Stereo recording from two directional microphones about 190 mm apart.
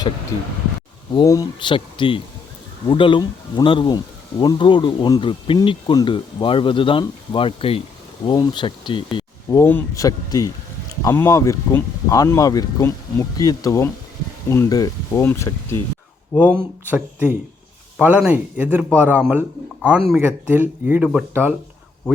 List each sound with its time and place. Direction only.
1.1 s speech: 20° left (ahead or behind)
9.6 s speech: 15° left (ahead or behind)
16.4 s speech: 10° right (ahead or behind)